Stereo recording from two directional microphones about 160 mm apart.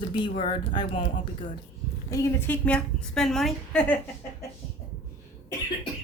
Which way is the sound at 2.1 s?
20° left (ahead or behind).